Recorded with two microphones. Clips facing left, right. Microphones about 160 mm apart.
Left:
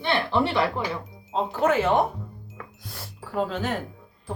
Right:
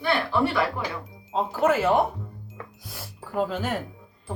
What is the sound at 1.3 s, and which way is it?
A man's voice, 5° right (ahead or behind).